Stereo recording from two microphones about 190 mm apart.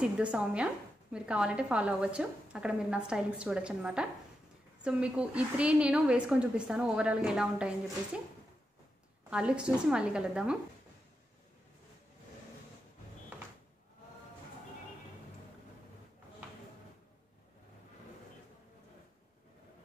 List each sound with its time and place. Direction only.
0.0 s a woman's voice: 5° right (ahead or behind)
9.3 s a woman's voice: 5° right (ahead or behind)